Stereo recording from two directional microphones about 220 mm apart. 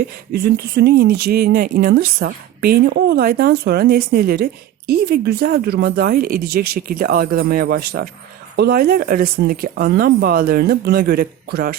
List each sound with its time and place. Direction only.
0.3 s speech: 45° right (ahead or behind)